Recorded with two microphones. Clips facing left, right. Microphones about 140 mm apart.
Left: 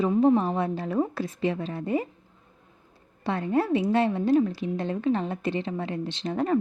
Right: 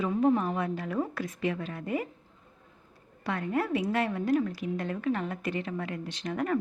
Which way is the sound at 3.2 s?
30° left (ahead or behind).